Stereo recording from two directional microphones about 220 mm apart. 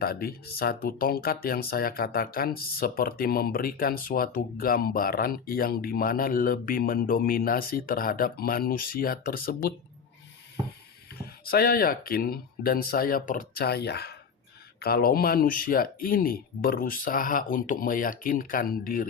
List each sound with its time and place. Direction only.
0.0 s speech: 45° left (ahead or behind)
11.1 s speech: 45° left (ahead or behind)